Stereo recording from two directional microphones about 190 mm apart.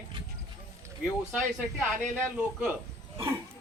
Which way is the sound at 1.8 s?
10° right (ahead or behind).